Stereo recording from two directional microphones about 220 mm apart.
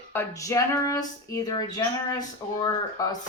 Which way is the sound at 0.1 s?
10° left (ahead or behind).